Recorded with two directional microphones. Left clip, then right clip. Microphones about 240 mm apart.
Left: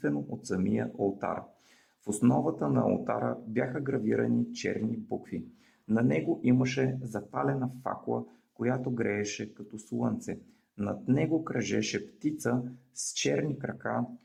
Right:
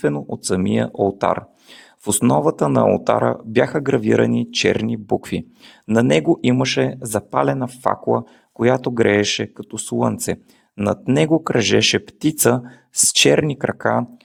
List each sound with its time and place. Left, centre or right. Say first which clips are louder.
0.0 s speech: right 12 dB; right